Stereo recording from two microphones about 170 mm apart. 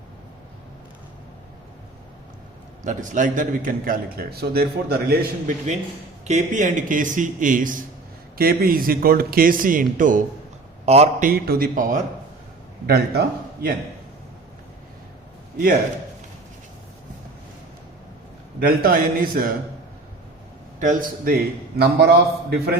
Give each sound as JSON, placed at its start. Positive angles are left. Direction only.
{"t": 2.8, "sound": "a man's voice", "side_deg": -50}
{"t": 6.2, "sound": "a man's voice", "side_deg": -45}
{"t": 10.8, "sound": "a man's voice", "side_deg": -40}
{"t": 11.3, "sound": "a man's voice", "side_deg": -60}
{"t": 12.9, "sound": "a man's voice", "side_deg": -70}
{"t": 18.6, "sound": "a man's voice", "side_deg": -60}
{"t": 20.7, "sound": "a man's voice", "side_deg": -50}
{"t": 21.8, "sound": "a man's voice", "side_deg": -75}